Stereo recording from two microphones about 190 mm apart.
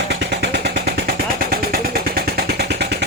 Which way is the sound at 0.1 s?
60° right (ahead or behind).